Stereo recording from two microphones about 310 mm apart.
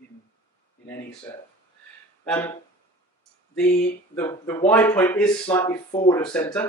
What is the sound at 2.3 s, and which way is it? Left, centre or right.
Speech, centre.